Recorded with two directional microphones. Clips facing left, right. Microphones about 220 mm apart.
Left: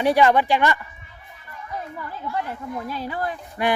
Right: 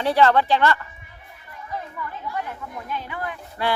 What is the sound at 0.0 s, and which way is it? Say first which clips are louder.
Speech: left 1 dB; 15° left (ahead or behind).